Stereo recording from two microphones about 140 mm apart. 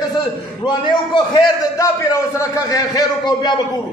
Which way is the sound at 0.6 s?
35° left (ahead or behind).